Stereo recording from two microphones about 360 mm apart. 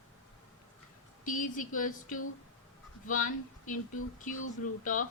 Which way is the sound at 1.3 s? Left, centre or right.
Left.